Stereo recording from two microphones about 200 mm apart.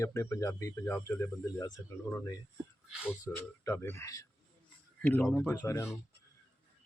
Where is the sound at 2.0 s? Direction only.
10° left (ahead or behind).